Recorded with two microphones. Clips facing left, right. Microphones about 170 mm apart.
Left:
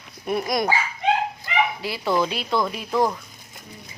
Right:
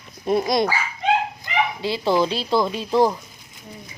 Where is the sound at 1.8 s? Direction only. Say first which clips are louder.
Right 3 dB; 25° right (ahead or behind).